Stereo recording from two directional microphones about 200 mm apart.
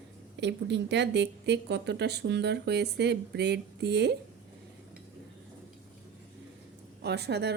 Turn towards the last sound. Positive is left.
turn(degrees=-55)  # may be behind; listen again after turning